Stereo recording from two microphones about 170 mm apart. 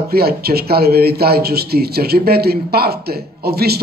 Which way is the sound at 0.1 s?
65° right (ahead or behind).